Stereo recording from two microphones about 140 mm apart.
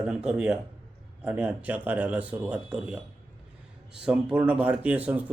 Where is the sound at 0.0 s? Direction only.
5° right (ahead or behind).